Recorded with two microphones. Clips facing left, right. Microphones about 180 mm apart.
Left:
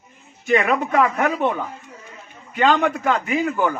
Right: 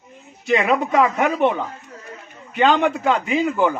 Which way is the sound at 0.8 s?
15° right (ahead or behind).